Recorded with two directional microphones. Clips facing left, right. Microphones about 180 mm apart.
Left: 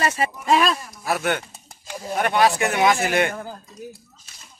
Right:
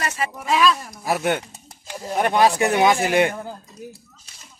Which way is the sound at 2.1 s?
30° right (ahead or behind).